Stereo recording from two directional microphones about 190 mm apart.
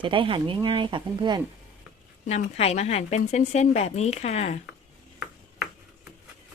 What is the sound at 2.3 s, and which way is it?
Speech, 35° left (ahead or behind).